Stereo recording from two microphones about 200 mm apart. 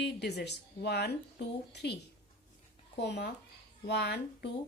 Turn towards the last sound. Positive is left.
turn(degrees=55)  # may be behind; listen again after turning